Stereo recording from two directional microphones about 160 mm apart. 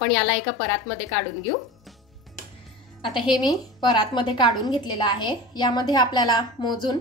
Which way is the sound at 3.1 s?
30° left (ahead or behind).